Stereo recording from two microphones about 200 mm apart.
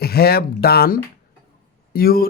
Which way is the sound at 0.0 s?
50° left (ahead or behind).